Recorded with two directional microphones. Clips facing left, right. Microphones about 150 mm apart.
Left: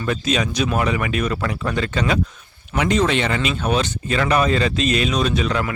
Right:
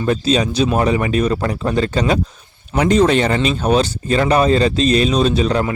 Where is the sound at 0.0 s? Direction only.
30° right (ahead or behind).